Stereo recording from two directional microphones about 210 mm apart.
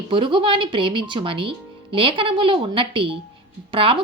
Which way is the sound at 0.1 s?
25° right (ahead or behind).